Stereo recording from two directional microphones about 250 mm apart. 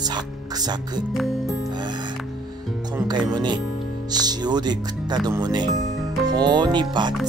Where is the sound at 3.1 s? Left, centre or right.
Centre.